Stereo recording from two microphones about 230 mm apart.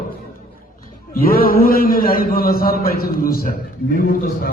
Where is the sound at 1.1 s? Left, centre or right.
Left.